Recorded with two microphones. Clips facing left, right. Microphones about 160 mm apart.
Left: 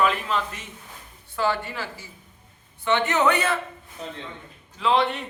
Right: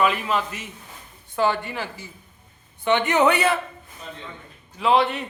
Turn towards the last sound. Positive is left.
turn(degrees=-5)  # may be behind; listen again after turning